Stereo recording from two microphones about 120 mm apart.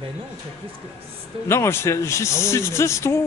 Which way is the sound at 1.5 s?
20° left (ahead or behind).